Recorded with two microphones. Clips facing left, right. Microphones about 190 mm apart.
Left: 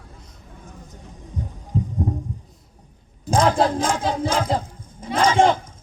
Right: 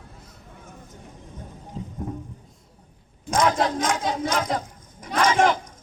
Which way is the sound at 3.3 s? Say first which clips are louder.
Left 3 dB; 30° left (ahead or behind).